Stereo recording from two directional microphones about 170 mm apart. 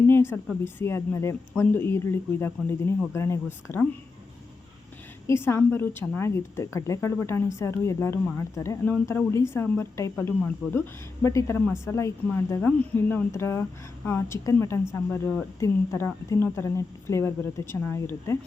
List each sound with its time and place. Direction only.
0.1 s a sound: 15° left (ahead or behind)
0.6 s a woman's voice: 15° left (ahead or behind)
5.2 s a woman's voice: 15° left (ahead or behind)